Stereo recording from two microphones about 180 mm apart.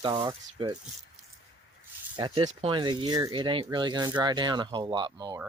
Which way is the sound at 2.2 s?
25° right (ahead or behind).